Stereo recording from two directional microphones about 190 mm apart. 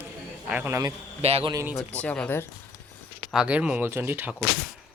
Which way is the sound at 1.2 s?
30° right (ahead or behind).